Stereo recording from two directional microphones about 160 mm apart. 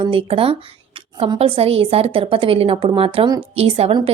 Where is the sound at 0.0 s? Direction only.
35° right (ahead or behind).